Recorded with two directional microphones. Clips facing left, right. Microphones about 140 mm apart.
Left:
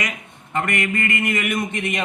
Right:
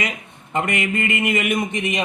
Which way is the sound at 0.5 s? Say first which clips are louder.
Right 1 dB; 20° right (ahead or behind).